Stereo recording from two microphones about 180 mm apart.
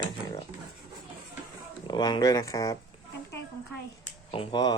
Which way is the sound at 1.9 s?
25° left (ahead or behind).